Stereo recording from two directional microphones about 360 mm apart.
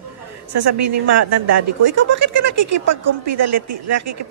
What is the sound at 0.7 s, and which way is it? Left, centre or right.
A woman's voice, right.